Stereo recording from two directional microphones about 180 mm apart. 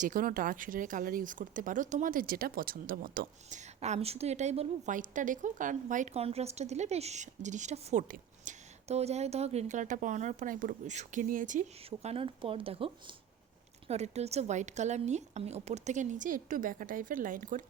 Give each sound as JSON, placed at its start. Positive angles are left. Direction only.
{"t": 0.0, "sound": "a woman's voice", "side_deg": -50}